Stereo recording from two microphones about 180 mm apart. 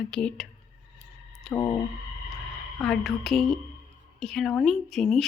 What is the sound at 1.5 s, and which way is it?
Speech, 20° left (ahead or behind).